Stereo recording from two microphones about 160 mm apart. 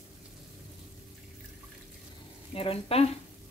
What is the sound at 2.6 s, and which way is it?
Speech, 35° left (ahead or behind).